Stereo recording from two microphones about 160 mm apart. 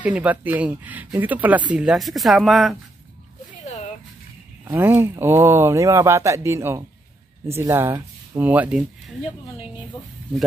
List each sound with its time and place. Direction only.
0.0 s speech: 10° right (ahead or behind)
4.6 s speech: 15° right (ahead or behind)